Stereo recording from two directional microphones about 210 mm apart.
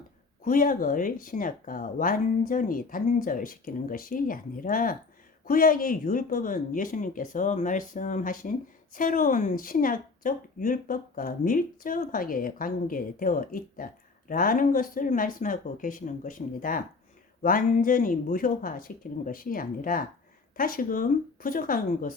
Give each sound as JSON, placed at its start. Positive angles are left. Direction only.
{"t": 0.4, "sound": "speech", "side_deg": 40}